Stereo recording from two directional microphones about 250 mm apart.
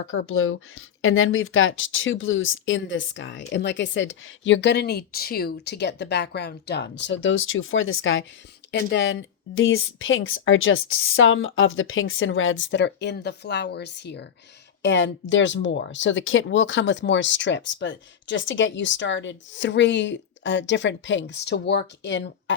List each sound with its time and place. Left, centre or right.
0.0 s speech: left